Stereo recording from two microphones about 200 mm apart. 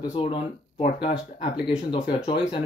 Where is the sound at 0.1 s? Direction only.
30° left (ahead or behind).